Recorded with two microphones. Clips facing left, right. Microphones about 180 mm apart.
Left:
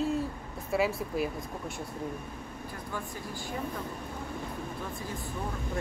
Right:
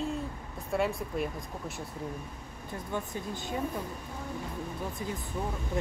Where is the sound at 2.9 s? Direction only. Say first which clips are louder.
Right 4 dB; 20° right (ahead or behind).